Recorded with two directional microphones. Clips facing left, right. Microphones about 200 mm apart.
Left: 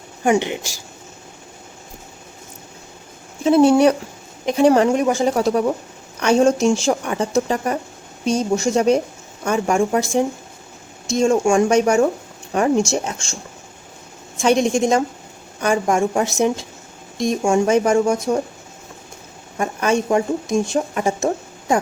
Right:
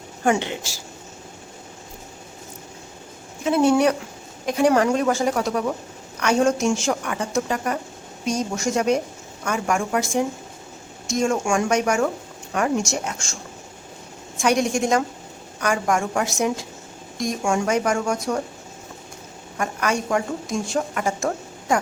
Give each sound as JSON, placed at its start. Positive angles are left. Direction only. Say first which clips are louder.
{"t": 0.3, "sound": "speech", "louder": "left 4 dB", "side_deg": 15}
{"t": 3.4, "sound": "speech", "louder": "left 5 dB", "side_deg": 30}
{"t": 5.3, "sound": "speech", "louder": "left 5 dB", "side_deg": 30}
{"t": 14.4, "sound": "speech", "louder": "left 4 dB", "side_deg": 25}
{"t": 19.5, "sound": "speech", "louder": "left 5 dB", "side_deg": 25}